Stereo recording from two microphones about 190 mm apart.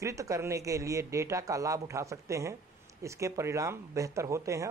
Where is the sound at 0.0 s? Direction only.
15° right (ahead or behind).